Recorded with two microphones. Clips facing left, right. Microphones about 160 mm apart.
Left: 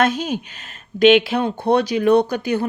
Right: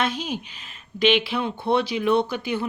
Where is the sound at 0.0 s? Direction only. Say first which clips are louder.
Left 7 dB; 45° left (ahead or behind).